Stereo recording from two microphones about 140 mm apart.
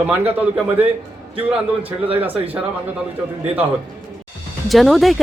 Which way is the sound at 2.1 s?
10° right (ahead or behind).